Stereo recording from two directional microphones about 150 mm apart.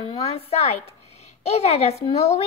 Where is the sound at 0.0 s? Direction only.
35° left (ahead or behind).